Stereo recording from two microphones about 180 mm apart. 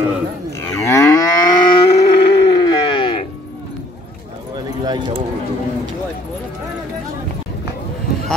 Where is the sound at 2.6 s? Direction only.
25° left (ahead or behind).